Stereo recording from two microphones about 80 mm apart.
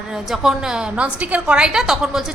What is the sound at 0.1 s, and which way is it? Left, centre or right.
A woman's voice, centre.